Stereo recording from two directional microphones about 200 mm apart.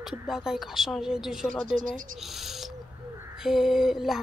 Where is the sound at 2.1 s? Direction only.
Centre (ahead or behind).